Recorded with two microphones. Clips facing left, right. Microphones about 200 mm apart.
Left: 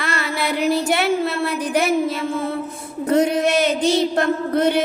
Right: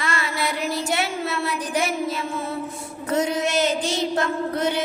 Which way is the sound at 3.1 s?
60° left (ahead or behind).